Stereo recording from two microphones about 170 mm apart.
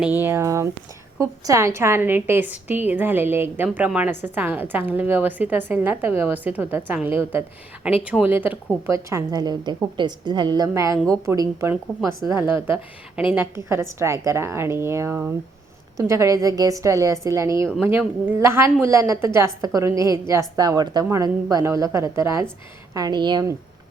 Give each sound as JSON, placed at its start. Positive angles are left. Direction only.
{"t": 0.0, "sound": "a woman's voice", "side_deg": -10}